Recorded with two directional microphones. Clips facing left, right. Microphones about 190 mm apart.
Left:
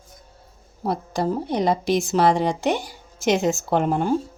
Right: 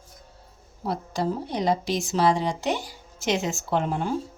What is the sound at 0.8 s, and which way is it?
A woman's voice, 50° left (ahead or behind).